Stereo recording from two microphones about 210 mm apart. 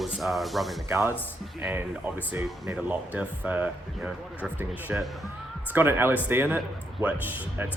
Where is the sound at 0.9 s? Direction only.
10° right (ahead or behind).